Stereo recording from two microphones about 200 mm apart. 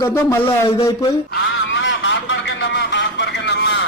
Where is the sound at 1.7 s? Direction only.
70° left (ahead or behind).